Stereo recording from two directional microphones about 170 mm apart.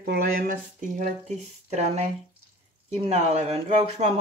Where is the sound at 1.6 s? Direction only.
40° right (ahead or behind).